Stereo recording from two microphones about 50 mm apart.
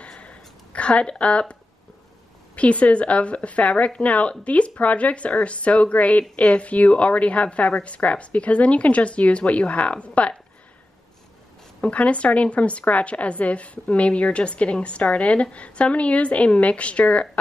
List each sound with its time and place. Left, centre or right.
0.0 s a sound: left
2.5 s a woman's voice: left
11.8 s a woman's voice: left